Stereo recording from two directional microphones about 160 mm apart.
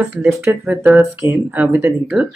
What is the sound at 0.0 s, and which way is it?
Speech, 10° right (ahead or behind).